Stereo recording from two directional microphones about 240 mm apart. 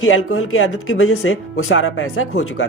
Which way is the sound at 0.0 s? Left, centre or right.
Left.